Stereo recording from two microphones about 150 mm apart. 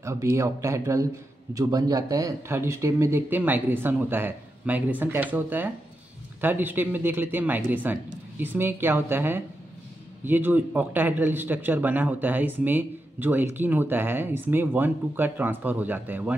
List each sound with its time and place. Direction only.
0.0 s a man's voice: 20° right (ahead or behind)